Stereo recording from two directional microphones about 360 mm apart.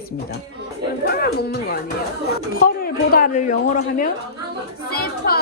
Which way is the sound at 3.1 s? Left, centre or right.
Left.